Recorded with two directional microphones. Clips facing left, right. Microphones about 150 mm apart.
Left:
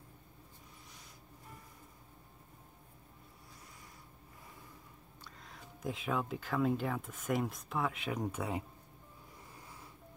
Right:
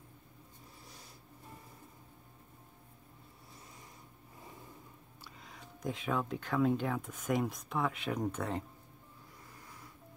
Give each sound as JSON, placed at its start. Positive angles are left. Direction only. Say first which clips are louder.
{"t": 5.2, "sound": "speech", "louder": "right 1 dB", "side_deg": 0}
{"t": 9.6, "sound": "snoring", "louder": "even", "side_deg": 25}